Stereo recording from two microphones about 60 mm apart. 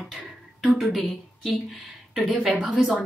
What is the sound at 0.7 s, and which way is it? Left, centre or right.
Speech, centre.